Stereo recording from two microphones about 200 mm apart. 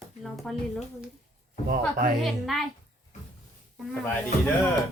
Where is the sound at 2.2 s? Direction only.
Centre (ahead or behind).